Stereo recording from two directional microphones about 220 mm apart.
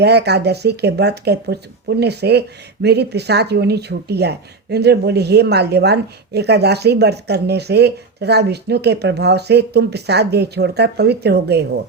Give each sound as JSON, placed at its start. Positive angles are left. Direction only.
{"t": 0.0, "sound": "speech", "side_deg": -50}